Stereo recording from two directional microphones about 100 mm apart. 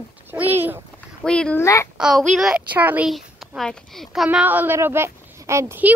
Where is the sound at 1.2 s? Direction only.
10° left (ahead or behind).